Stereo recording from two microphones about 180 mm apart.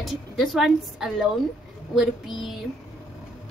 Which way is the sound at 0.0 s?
Centre (ahead or behind).